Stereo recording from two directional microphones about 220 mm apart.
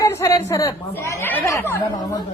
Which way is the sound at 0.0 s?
15° left (ahead or behind).